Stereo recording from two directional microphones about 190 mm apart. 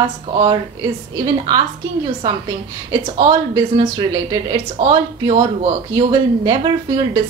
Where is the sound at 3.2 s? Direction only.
20° right (ahead or behind).